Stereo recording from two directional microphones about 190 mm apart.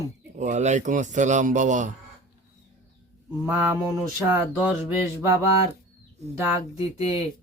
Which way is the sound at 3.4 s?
10° right (ahead or behind).